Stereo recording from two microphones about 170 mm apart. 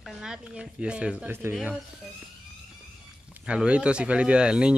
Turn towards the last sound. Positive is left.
turn(degrees=-5)  # may be behind; listen again after turning